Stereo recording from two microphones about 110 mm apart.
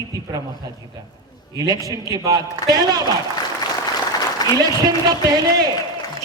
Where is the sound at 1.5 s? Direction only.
35° right (ahead or behind).